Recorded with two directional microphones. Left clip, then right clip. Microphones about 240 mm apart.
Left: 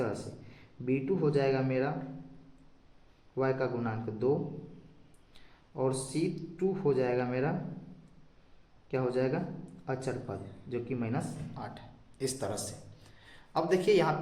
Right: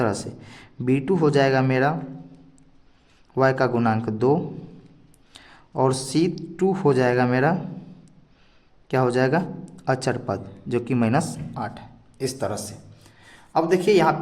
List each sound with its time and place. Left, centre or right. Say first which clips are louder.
0.0 s speech: right 10 dB; right
3.3 s a man's voice: right 11 dB; right
8.9 s speech: right 11 dB; right